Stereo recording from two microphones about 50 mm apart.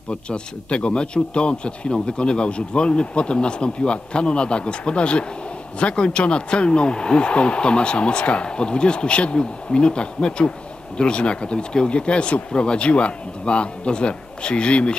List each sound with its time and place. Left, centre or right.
0.1 s a man's voice: left